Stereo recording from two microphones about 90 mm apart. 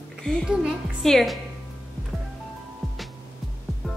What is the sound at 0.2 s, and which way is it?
A woman's voice, 10° left (ahead or behind).